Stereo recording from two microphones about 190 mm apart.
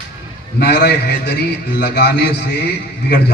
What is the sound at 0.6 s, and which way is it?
A man's voice, 60° left (ahead or behind).